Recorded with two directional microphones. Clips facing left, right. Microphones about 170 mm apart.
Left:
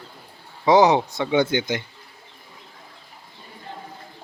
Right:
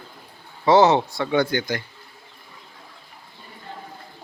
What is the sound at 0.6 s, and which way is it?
Speech, 15° left (ahead or behind).